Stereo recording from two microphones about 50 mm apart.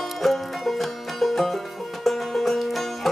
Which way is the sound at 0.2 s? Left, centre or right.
Centre.